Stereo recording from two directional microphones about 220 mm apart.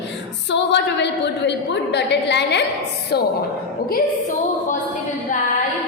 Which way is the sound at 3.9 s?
35° left (ahead or behind).